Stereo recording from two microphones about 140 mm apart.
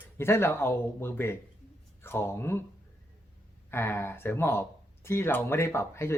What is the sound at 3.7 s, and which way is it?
Speech, 15° left (ahead or behind).